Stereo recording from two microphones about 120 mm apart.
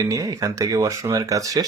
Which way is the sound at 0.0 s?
30° right (ahead or behind).